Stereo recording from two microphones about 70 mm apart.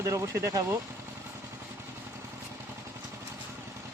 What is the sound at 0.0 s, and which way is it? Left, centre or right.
Speech, right.